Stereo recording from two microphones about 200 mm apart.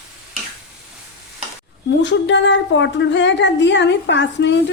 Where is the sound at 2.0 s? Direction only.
65° left (ahead or behind).